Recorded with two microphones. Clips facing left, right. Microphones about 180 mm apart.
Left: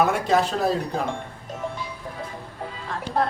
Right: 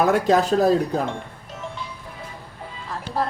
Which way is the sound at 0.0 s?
40° right (ahead or behind).